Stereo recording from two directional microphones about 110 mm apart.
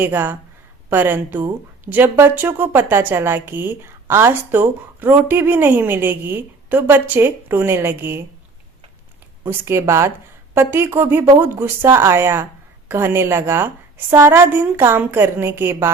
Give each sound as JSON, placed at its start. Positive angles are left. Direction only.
{"t": 0.0, "sound": "speech", "side_deg": -20}
{"t": 9.4, "sound": "speech", "side_deg": -20}